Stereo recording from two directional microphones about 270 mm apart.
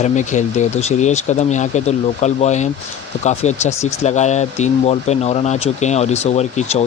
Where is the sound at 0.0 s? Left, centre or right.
Left.